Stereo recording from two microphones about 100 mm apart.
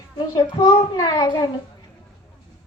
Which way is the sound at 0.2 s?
45° left (ahead or behind).